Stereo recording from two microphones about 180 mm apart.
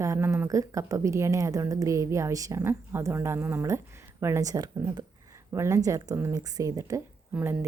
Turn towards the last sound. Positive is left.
turn(degrees=-10)  # may be behind; listen again after turning